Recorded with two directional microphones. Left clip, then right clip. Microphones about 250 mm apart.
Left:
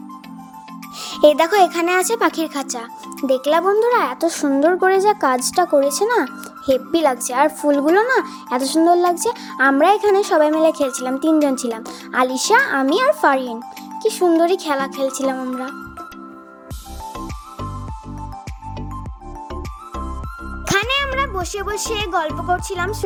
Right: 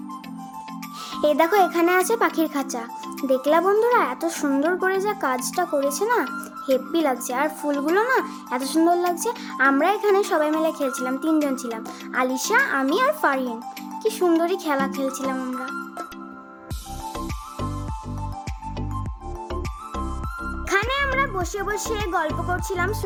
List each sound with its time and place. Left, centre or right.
1.1 s speech: left
20.7 s music: left
21.2 s a child's voice: centre